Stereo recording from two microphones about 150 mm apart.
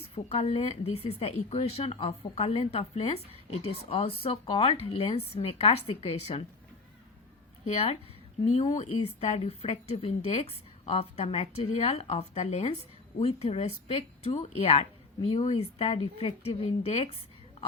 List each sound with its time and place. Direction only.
0.1 s a woman's voice: 45° left (ahead or behind)
7.7 s a woman's voice: 45° left (ahead or behind)